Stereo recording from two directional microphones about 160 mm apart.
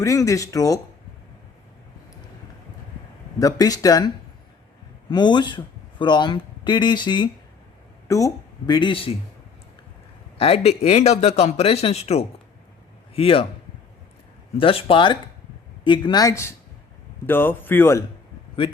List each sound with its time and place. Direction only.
0.0 s speech: 20° left (ahead or behind)
3.3 s speech: 20° left (ahead or behind)
10.3 s a man's voice: 40° left (ahead or behind)
14.6 s a man's voice: 35° left (ahead or behind); by 18.0 s 15° left (ahead or behind)